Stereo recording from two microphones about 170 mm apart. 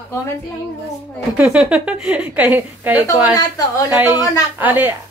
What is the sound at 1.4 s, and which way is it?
A woman's voice, 5° right (ahead or behind).